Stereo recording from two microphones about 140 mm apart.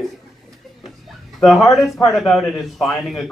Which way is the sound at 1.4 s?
Centre (ahead or behind).